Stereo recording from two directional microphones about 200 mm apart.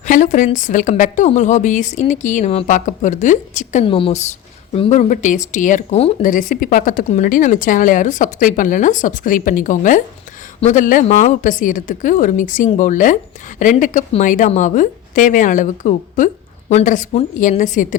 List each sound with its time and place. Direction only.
0.0 s a woman's voice: 40° left (ahead or behind)